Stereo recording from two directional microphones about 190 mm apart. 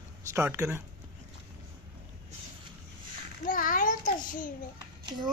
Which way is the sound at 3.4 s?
45° left (ahead or behind).